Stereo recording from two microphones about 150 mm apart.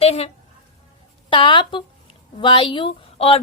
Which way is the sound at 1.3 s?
35° left (ahead or behind).